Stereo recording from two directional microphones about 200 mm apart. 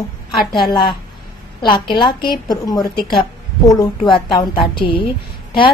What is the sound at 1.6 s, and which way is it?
A woman's voice, 25° left (ahead or behind).